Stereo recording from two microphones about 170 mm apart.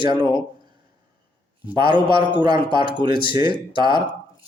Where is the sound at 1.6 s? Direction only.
25° right (ahead or behind).